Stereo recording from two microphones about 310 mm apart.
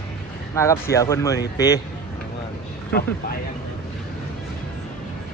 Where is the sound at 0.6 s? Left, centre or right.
Centre.